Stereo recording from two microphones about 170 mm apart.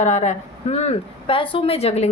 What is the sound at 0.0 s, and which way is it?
A woman's voice, 45° left (ahead or behind).